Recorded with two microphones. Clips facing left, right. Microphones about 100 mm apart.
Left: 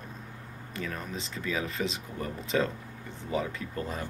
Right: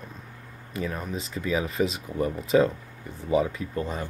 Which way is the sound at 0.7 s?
10° right (ahead or behind).